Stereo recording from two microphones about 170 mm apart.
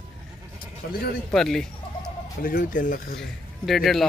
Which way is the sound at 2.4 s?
55° left (ahead or behind).